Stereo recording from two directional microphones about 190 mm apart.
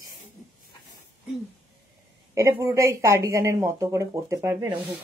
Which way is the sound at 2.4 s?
15° right (ahead or behind).